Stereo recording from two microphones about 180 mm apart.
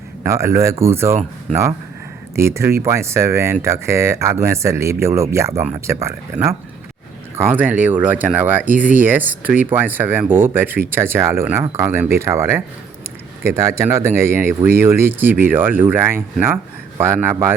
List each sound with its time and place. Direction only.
0.2 s speech: 15° right (ahead or behind)
2.3 s speech: 15° right (ahead or behind)